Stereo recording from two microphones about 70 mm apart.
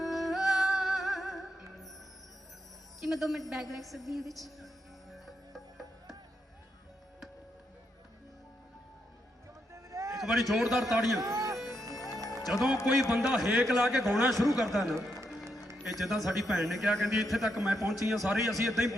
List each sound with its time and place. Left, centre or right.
0.0 s music: centre
3.0 s speech: centre
5.1 s music: centre
9.7 s a sound: right
10.2 s speech: centre
11.2 s music: right
11.6 s music: centre
12.1 s music: right
12.5 s a man's voice: centre